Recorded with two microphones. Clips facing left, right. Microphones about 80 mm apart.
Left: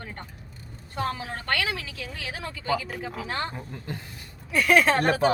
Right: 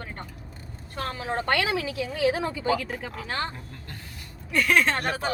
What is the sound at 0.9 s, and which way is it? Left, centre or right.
Speech, centre.